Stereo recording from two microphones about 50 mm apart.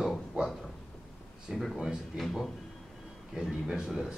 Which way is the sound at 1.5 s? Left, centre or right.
Centre.